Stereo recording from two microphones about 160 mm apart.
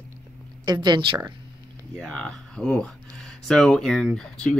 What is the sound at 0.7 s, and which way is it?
Speech, 25° right (ahead or behind).